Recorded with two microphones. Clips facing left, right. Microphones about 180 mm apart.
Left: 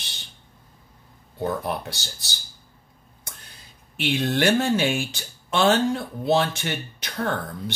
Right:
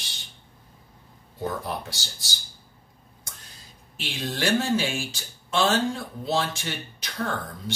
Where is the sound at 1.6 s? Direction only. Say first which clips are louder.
Left 4 dB; 60° left (ahead or behind).